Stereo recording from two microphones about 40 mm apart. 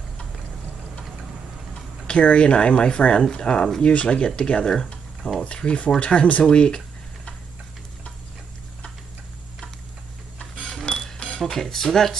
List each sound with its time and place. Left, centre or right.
2.0 s speech: left
5.2 s speech: left
6.4 s speech: left
10.9 s cash register: left
11.4 s speech: centre